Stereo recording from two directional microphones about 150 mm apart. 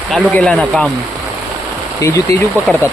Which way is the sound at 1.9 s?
20° left (ahead or behind).